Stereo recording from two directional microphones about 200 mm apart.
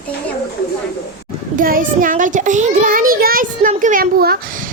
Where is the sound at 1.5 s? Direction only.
45° right (ahead or behind).